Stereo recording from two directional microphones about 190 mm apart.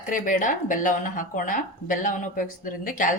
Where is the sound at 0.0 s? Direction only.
45° left (ahead or behind).